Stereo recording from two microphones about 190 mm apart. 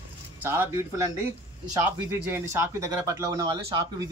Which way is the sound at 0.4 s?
10° right (ahead or behind).